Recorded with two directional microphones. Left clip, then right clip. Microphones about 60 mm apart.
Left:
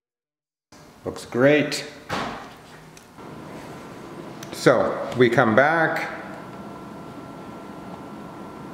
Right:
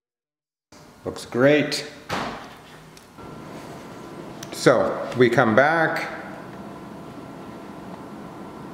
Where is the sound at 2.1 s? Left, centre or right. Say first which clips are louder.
Even; right.